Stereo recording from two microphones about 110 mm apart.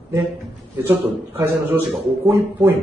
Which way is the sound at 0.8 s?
20° right (ahead or behind).